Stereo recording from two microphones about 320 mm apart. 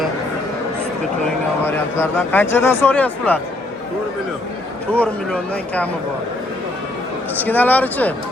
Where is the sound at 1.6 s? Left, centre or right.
Centre.